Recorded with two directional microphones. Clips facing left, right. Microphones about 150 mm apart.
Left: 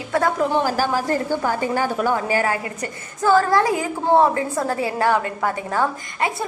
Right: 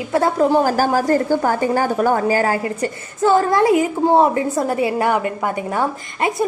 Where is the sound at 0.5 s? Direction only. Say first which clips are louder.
Right 4 dB; 45° right (ahead or behind).